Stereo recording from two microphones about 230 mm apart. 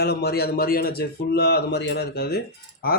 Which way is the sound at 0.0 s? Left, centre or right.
Left.